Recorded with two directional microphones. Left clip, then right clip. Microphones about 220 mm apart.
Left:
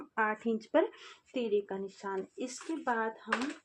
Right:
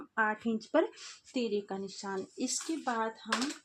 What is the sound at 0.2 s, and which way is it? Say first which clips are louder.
A woman's voice: even; 30° right (ahead or behind).